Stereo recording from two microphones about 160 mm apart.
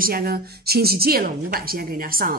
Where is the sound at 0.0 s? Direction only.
70° right (ahead or behind).